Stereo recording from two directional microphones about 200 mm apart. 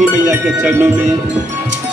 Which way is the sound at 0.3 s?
10° right (ahead or behind).